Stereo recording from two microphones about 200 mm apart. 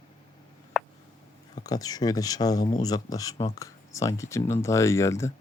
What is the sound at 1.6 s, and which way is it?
Speech, 20° left (ahead or behind).